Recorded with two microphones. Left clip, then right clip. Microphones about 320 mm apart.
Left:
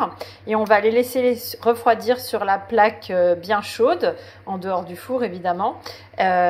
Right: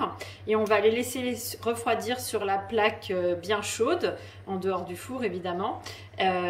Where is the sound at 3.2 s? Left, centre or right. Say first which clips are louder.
Left 12 dB; centre.